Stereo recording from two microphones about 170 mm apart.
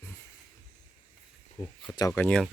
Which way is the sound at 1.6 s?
40° left (ahead or behind).